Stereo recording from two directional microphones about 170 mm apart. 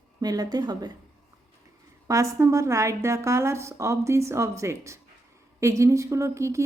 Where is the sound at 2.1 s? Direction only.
20° right (ahead or behind).